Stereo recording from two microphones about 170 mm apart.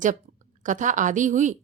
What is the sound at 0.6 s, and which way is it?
Speech, 50° right (ahead or behind).